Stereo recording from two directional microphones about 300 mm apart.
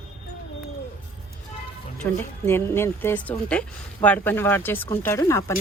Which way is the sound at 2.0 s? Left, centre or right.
Centre.